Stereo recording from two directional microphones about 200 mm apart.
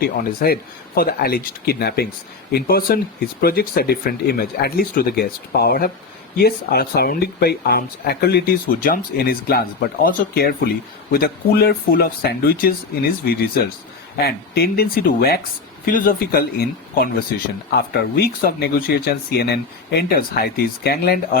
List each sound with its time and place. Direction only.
0.0 s speech: 50° left (ahead or behind)